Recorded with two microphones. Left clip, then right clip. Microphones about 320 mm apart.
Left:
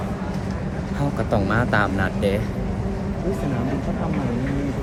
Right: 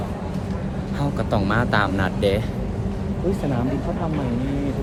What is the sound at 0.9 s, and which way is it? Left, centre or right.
Speech, centre.